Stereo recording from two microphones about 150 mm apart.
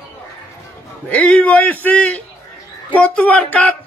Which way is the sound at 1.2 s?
10° left (ahead or behind).